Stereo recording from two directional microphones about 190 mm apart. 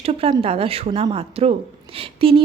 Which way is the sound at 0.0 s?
30° right (ahead or behind).